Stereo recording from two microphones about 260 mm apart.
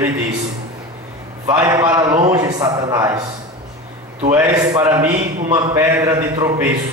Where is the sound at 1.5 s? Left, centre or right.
Centre.